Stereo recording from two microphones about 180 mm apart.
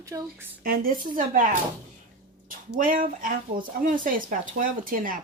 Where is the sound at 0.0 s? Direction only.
20° right (ahead or behind).